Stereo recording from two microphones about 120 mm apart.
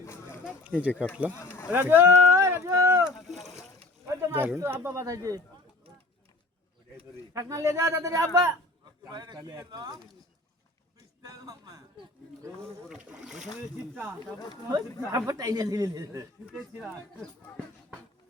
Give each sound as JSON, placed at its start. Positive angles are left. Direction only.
{"t": 0.0, "sound": "a sound", "side_deg": 20}
{"t": 0.4, "sound": "a sound", "side_deg": -10}
{"t": 1.5, "sound": "a sound", "side_deg": 20}
{"t": 1.7, "sound": "a sound", "side_deg": -15}
{"t": 3.2, "sound": "boat", "side_deg": 0}
{"t": 4.1, "sound": "speech", "side_deg": -20}
{"t": 7.3, "sound": "a man's voice", "side_deg": -25}
{"t": 11.2, "sound": "a man's voice", "side_deg": -30}
{"t": 12.8, "sound": "speech", "side_deg": -5}
{"t": 14.3, "sound": "speech", "side_deg": 35}
{"t": 15.1, "sound": "speech", "side_deg": -30}
{"t": 16.5, "sound": "speech", "side_deg": -5}